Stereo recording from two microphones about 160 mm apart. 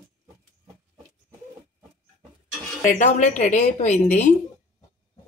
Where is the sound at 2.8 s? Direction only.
50° left (ahead or behind).